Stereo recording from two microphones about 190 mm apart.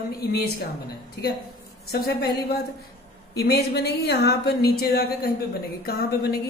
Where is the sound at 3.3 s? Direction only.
60° left (ahead or behind).